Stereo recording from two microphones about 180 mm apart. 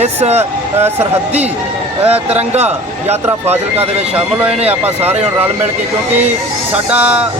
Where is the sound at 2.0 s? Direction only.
35° right (ahead or behind).